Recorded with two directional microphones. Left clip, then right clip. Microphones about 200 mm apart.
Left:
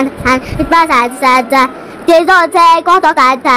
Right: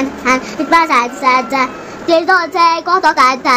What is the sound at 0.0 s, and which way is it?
A woman's voice, 15° left (ahead or behind).